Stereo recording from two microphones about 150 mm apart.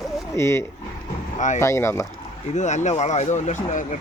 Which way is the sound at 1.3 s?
55° left (ahead or behind).